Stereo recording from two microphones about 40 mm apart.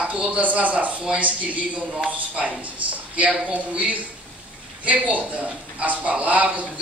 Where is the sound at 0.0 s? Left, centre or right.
Right.